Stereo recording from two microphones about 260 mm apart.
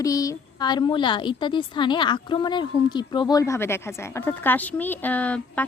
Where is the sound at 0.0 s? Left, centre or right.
Centre.